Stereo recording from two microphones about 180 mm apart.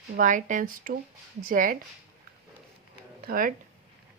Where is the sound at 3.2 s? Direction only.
50° right (ahead or behind).